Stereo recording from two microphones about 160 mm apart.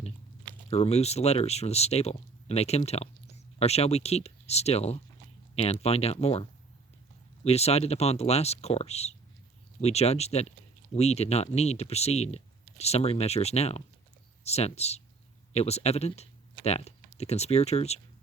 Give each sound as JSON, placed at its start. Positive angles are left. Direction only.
{"t": 0.7, "sound": "speech", "side_deg": 40}